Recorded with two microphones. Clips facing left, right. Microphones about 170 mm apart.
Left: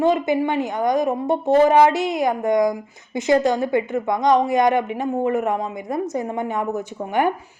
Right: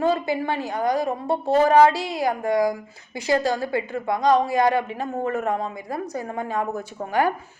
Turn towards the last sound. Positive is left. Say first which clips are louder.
# left 2 dB
turn(degrees=20)  # may be behind; listen again after turning